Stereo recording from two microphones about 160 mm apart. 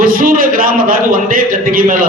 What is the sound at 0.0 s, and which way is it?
A man's voice, 60° right (ahead or behind).